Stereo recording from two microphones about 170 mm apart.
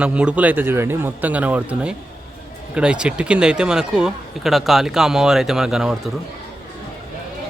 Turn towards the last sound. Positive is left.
turn(degrees=0)  # may be behind; listen again after turning